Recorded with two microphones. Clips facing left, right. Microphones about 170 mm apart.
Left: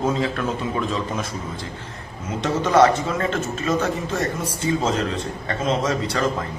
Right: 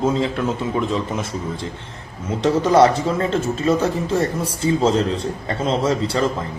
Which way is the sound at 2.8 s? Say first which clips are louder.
Left 1 dB; 30° right (ahead or behind).